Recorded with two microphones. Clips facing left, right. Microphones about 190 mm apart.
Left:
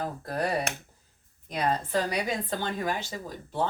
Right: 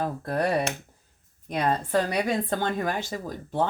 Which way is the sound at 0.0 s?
60° right (ahead or behind).